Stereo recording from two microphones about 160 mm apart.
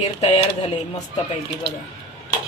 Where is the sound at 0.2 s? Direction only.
40° left (ahead or behind).